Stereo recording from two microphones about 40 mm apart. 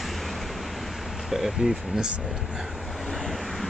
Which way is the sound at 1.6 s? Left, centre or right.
Centre.